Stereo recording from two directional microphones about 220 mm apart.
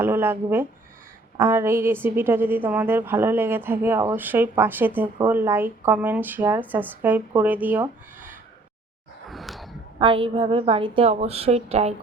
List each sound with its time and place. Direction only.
0.0 s a woman's voice: 10° right (ahead or behind)
9.3 s a sound: centre (ahead or behind)
10.0 s a woman's voice: 25° right (ahead or behind)